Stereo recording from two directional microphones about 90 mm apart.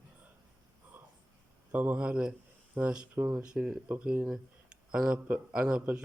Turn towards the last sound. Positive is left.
turn(degrees=-10)  # may be behind; listen again after turning